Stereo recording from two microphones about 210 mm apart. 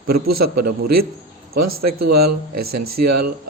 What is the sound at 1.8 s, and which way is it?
A man's voice, 50° right (ahead or behind).